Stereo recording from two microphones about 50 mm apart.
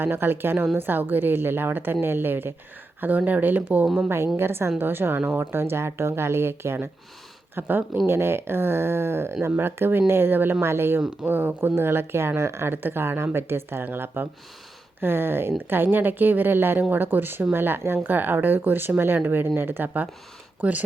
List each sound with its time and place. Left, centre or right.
0.0 s a woman's voice: right
4.4 s speech: right
7.5 s a woman's voice: right
8.0 s speech: right
11.3 s speech: right
11.7 s speech: right
12.7 s a woman's voice: right